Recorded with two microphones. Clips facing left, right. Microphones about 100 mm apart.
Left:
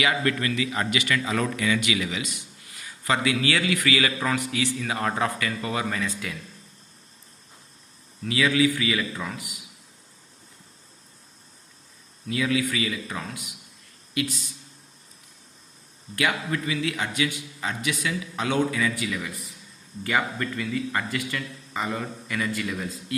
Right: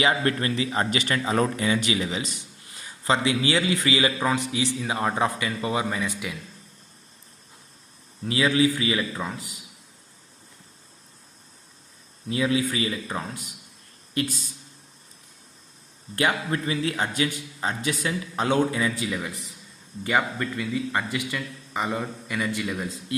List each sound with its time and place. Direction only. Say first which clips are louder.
0.0 s a man's voice: right 1 dB; 30° right (ahead or behind); by 6.3 s 15° right (ahead or behind)
8.2 s a man's voice: right 1 dB; 30° right (ahead or behind)
12.3 s a man's voice: right 1 dB; 30° right (ahead or behind)
16.1 s a man's voice: right 2 dB; 35° right (ahead or behind)